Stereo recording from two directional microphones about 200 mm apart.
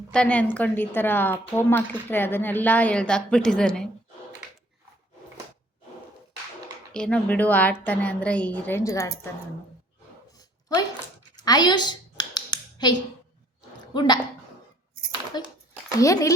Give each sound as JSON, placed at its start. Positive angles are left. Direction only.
{"t": 0.1, "sound": "a woman's voice", "side_deg": 5}
{"t": 6.9, "sound": "a woman's voice", "side_deg": 5}
{"t": 11.3, "sound": "computer keyboard", "side_deg": 20}
{"t": 13.9, "sound": "speech", "side_deg": 20}
{"t": 15.3, "sound": "a child's voice", "side_deg": 20}